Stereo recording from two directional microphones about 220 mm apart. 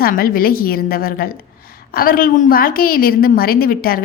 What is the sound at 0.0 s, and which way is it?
A woman's voice, 40° left (ahead or behind).